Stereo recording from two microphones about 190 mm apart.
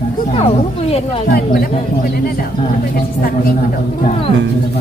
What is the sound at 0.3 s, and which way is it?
Speech, 30° left (ahead or behind).